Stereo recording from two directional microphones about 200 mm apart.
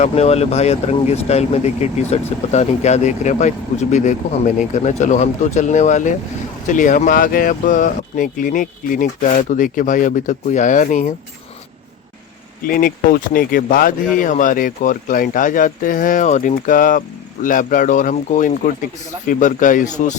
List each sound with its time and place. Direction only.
0.0 s speech: 30° left (ahead or behind)
12.6 s speech: 45° left (ahead or behind)